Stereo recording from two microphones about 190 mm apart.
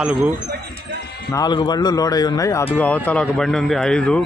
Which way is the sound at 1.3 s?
20° left (ahead or behind).